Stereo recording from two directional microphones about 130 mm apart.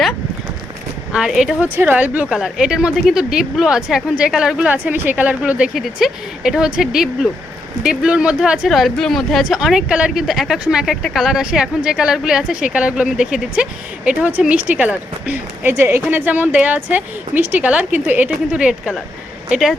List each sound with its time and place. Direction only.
1.1 s speech: 5° right (ahead or behind)
1.6 s a woman's voice: 15° right (ahead or behind)